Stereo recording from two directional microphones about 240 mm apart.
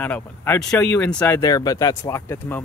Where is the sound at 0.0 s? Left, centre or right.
Centre.